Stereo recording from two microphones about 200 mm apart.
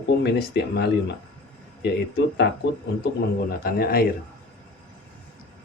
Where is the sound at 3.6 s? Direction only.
50° left (ahead or behind).